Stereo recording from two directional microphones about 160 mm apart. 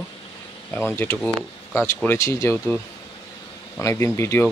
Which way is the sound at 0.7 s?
15° left (ahead or behind).